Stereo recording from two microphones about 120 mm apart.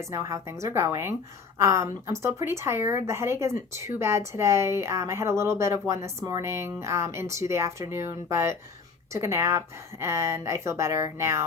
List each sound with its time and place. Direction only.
0.1 s a woman's voice: 25° right (ahead or behind)